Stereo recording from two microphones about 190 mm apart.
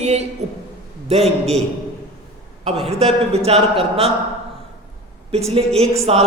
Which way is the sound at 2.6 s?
30° right (ahead or behind).